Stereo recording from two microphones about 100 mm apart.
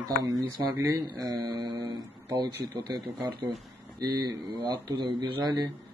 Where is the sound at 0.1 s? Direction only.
40° right (ahead or behind).